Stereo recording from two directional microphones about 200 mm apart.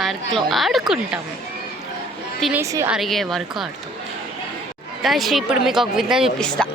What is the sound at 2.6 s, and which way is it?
Speech, 15° right (ahead or behind).